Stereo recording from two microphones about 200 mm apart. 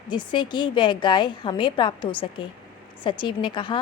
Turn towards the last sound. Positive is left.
turn(degrees=25)  # may be behind; listen again after turning